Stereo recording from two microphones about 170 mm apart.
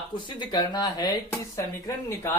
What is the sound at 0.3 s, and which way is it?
Speech, 25° left (ahead or behind).